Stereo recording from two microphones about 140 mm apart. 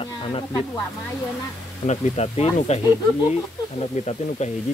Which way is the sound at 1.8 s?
50° left (ahead or behind).